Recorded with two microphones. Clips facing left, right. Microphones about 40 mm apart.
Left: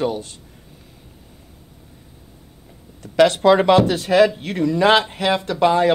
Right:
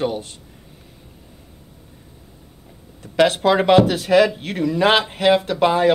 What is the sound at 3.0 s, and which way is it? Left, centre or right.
Speech, centre.